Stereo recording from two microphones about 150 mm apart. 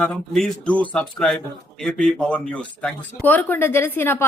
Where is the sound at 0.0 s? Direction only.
5° left (ahead or behind).